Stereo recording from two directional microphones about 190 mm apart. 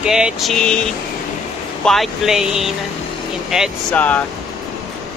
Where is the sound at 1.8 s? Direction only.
Centre (ahead or behind).